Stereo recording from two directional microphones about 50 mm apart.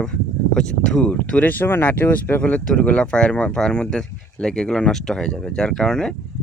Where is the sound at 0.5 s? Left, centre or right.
Centre.